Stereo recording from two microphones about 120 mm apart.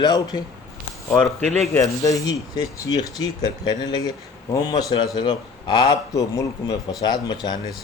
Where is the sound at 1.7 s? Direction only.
30° left (ahead or behind).